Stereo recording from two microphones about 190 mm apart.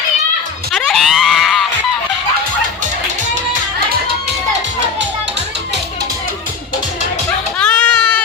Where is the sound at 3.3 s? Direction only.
45° right (ahead or behind).